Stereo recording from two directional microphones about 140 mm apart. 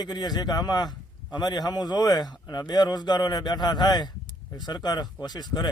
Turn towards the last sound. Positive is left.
turn(degrees=30)  # may be behind; listen again after turning